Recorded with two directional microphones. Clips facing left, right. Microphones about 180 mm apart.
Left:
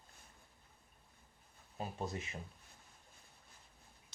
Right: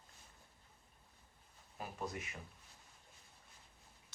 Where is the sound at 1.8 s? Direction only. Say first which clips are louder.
Left 3 dB; 25° left (ahead or behind).